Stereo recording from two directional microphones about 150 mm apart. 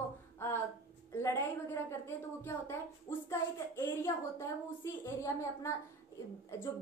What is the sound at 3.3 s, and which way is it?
A woman's voice, 20° left (ahead or behind).